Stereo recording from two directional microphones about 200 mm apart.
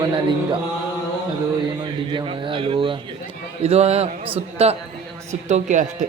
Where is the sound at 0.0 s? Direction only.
25° right (ahead or behind).